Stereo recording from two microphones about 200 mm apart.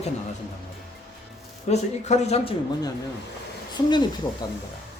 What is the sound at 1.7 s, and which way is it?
Speech, 35° left (ahead or behind).